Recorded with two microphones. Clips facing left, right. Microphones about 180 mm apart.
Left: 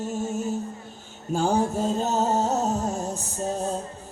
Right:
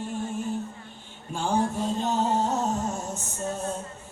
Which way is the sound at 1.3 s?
40° left (ahead or behind).